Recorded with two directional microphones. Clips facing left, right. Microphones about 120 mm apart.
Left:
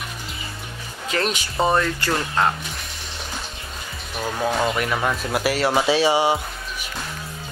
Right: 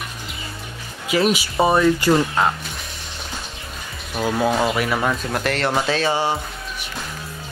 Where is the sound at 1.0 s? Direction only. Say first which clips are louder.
Right 5 dB; 10° right (ahead or behind).